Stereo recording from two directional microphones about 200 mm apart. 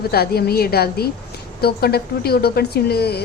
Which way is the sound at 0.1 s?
50° left (ahead or behind).